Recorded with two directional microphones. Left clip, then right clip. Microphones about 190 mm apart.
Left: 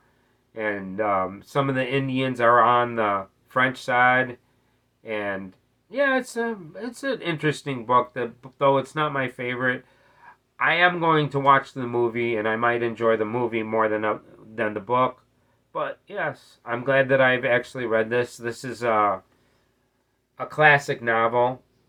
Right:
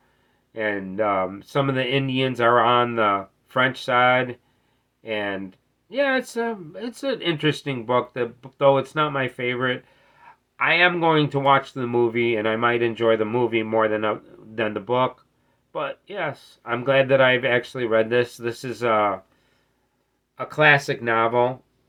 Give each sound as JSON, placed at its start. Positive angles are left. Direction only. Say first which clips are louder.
{"t": 0.5, "sound": "speech", "louder": "right 2 dB", "side_deg": -15}
{"t": 20.3, "sound": "speech", "louder": "even", "side_deg": -20}